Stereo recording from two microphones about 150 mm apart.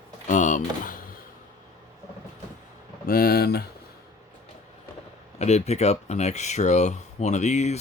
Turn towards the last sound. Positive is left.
turn(degrees=50)  # may be behind; listen again after turning